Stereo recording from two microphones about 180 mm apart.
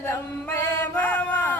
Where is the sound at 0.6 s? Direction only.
10° left (ahead or behind).